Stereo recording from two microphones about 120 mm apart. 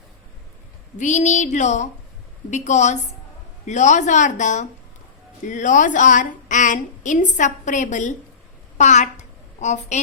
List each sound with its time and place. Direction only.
0.9 s a sound: 90° left
3.7 s a woman's voice: 85° left
8.8 s a woman's voice: 75° left (ahead or behind)